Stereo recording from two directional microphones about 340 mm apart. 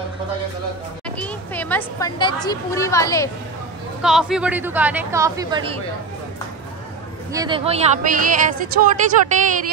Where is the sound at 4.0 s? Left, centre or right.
Centre.